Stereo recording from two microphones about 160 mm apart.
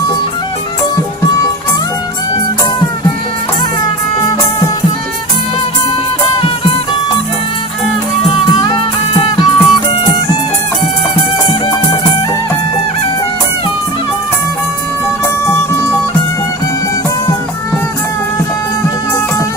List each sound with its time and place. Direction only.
9.2 s music: 25° left (ahead or behind)
11.4 s music: 25° left (ahead or behind)